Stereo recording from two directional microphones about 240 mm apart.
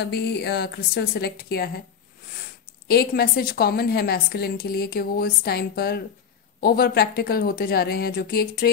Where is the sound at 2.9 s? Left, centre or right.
Left.